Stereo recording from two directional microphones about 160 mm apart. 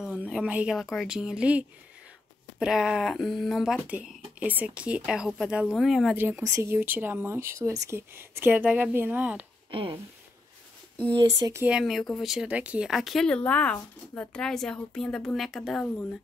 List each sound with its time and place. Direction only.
0.0 s speech: 5° right (ahead or behind)
2.6 s speech: 5° right (ahead or behind)
6.1 s speech: 10° right (ahead or behind)
9.7 s speech: 35° right (ahead or behind)
11.6 s speech: 5° right (ahead or behind)